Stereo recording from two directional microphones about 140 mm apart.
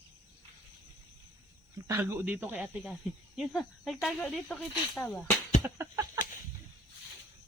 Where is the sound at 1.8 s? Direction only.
15° right (ahead or behind); by 5.0 s centre (ahead or behind).